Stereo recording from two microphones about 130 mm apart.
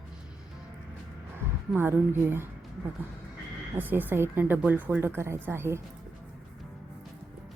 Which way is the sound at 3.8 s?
15° right (ahead or behind).